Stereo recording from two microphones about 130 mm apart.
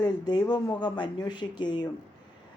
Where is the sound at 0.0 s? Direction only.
30° left (ahead or behind).